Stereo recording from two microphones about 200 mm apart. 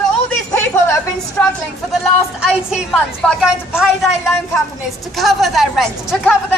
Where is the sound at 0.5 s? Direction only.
10° left (ahead or behind).